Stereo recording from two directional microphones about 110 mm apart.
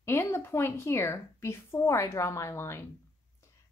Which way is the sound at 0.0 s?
20° left (ahead or behind).